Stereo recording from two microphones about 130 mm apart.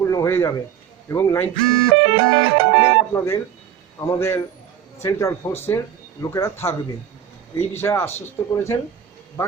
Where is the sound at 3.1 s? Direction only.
20° left (ahead or behind).